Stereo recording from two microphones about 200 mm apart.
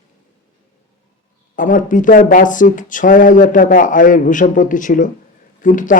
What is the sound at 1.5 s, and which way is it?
Speech, 40° left (ahead or behind).